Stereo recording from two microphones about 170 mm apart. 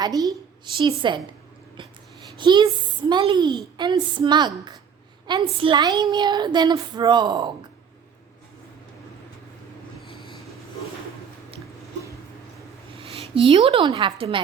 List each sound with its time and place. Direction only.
0.0 s a woman's voice: 20° right (ahead or behind)
2.4 s a woman's voice: 25° right (ahead or behind)
13.3 s speech: 35° right (ahead or behind)